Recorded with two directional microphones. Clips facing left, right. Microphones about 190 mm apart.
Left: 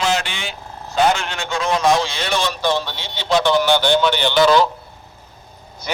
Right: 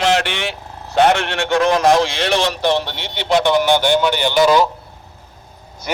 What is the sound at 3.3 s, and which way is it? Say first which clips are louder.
A man's voice: right 1 dB; 15° right (ahead or behind).